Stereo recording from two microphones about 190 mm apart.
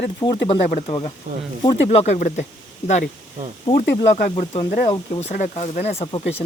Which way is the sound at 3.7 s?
35° left (ahead or behind).